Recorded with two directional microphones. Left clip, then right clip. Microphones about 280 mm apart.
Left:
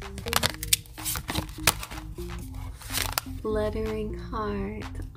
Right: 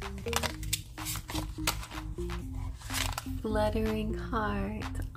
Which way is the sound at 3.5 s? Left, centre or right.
Centre.